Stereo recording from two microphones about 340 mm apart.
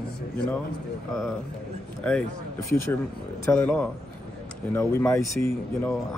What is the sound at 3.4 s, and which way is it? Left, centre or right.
A man's voice, centre.